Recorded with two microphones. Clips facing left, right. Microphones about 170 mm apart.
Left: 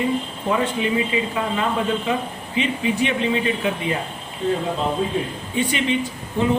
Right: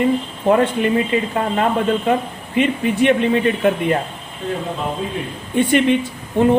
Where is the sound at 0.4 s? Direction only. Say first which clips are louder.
Right 7 dB; 55° right (ahead or behind).